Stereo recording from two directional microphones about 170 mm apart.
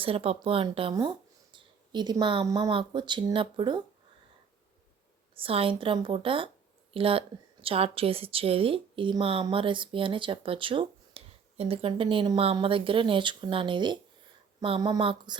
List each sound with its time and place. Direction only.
0.0 s a woman's voice: 35° right (ahead or behind)
5.3 s a woman's voice: 35° right (ahead or behind)